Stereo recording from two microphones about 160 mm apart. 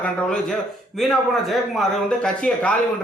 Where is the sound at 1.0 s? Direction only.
Centre (ahead or behind).